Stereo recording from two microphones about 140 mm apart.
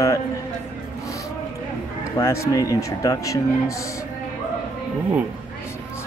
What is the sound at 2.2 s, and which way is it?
Speech, 20° left (ahead or behind).